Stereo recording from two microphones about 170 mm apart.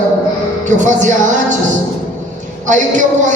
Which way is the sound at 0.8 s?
45° right (ahead or behind).